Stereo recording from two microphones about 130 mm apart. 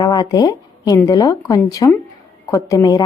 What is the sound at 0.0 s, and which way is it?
A woman's voice, 30° left (ahead or behind).